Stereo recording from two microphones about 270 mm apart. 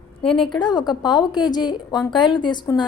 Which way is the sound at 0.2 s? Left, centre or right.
Centre.